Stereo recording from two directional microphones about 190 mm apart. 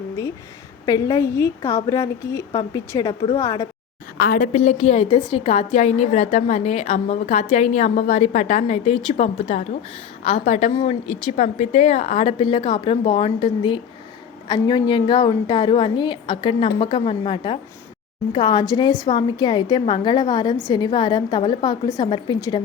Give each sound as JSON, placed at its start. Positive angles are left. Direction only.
{"t": 0.9, "sound": "a woman's voice", "side_deg": 20}
{"t": 4.2, "sound": "a woman's voice", "side_deg": 45}